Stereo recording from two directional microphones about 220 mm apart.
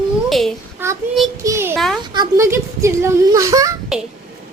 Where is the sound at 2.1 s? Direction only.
15° right (ahead or behind).